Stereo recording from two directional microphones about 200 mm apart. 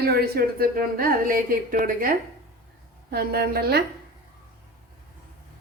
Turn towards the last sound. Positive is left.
turn(degrees=-50)  # may be behind; listen again after turning